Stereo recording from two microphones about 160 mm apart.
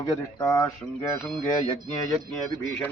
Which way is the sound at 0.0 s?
20° left (ahead or behind).